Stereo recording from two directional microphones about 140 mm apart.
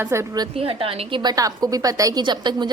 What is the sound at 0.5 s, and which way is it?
A woman's voice, 40° right (ahead or behind).